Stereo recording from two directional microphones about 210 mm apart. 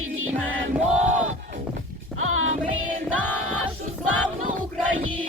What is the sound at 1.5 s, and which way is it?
Music, 35° right (ahead or behind).